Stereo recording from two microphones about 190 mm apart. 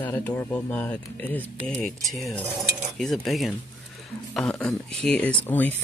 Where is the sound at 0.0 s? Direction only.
10° left (ahead or behind).